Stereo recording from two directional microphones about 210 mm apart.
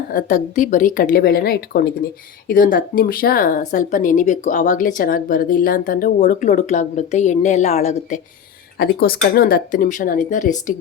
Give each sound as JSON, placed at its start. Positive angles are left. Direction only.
{"t": 0.1, "sound": "speech", "side_deg": 40}
{"t": 8.8, "sound": "speech", "side_deg": 45}